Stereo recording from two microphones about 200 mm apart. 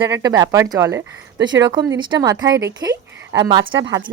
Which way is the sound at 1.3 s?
70° right (ahead or behind).